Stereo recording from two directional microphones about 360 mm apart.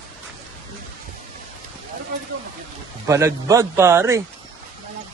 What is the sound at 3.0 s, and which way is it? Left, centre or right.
A man's voice, centre.